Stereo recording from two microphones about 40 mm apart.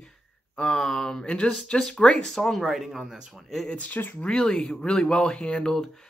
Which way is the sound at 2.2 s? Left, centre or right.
Centre.